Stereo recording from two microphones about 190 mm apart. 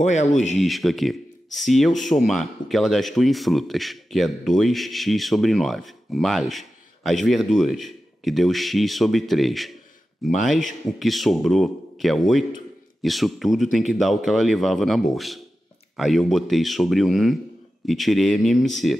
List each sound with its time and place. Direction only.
0.0 s speech: 40° left (ahead or behind)
0.6 s speech: centre (ahead or behind)